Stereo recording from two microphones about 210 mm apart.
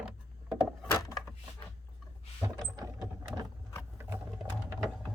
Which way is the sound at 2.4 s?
15° right (ahead or behind).